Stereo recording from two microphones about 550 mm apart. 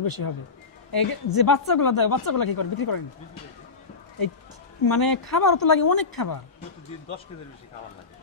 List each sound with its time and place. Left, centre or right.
0.0 s a woman's voice: left
4.8 s a woman's voice: left